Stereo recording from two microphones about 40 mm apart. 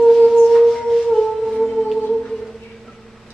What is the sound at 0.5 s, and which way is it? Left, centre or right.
Music, centre.